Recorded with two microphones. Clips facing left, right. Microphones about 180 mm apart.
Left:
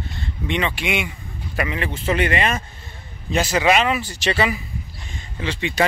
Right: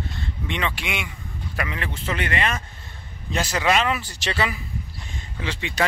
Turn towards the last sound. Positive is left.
turn(degrees=-5)  # may be behind; listen again after turning